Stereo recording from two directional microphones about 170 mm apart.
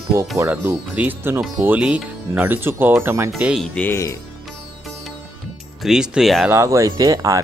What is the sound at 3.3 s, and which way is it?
Speech, 5° right (ahead or behind).